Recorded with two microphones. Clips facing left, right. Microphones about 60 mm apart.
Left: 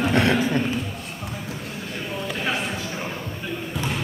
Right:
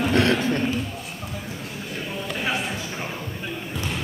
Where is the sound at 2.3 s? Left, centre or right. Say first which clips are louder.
Even; centre.